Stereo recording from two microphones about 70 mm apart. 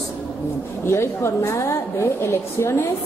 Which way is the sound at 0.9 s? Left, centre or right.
Left.